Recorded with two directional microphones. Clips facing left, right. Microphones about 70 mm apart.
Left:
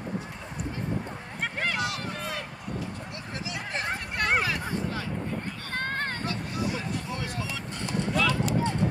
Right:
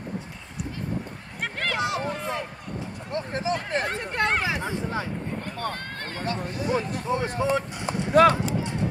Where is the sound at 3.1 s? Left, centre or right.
Right.